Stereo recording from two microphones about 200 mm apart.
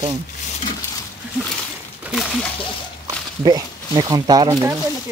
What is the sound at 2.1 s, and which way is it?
Speech, centre (ahead or behind).